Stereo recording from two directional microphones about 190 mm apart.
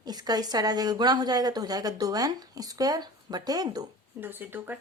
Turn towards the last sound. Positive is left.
turn(degrees=-10)  # may be behind; listen again after turning